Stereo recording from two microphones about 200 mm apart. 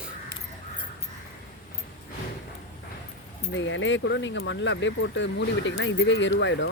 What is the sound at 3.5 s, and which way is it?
Speech, 70° left (ahead or behind).